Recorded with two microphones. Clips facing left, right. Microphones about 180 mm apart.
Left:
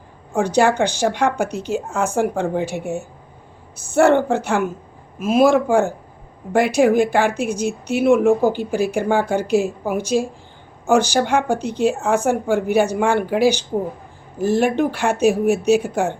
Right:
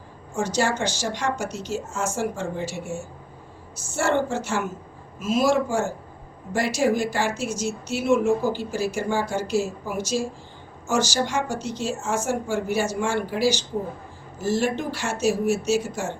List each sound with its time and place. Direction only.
0.3 s a woman's voice: 60° left (ahead or behind)